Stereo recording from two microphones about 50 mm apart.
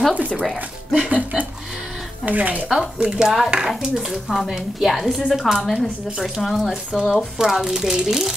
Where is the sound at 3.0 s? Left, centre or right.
Centre.